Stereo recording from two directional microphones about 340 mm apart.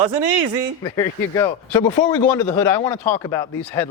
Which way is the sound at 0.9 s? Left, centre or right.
Centre.